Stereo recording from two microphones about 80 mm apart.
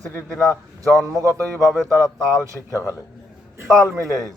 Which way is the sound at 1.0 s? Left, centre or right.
Right.